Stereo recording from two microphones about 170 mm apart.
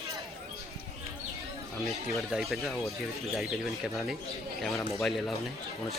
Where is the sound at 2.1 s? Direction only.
Centre (ahead or behind).